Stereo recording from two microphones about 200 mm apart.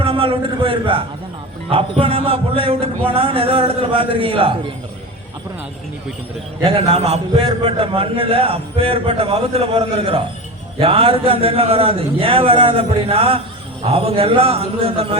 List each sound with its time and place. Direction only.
0.0 s a man's voice: 25° right (ahead or behind)
6.6 s a man's voice: 30° right (ahead or behind)